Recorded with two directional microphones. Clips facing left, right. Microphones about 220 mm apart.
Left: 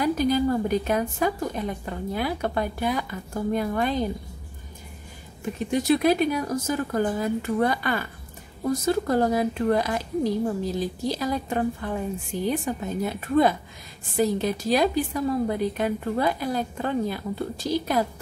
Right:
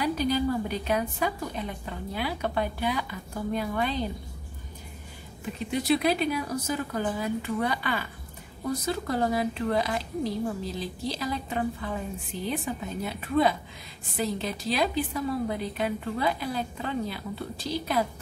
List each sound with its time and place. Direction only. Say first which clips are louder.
0.0 s a woman's voice: left 4 dB; 45° left (ahead or behind)
5.7 s a woman's voice: left 4 dB; 45° left (ahead or behind)